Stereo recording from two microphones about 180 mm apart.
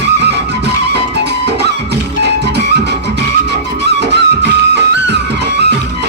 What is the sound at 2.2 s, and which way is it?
Music, 70° right (ahead or behind).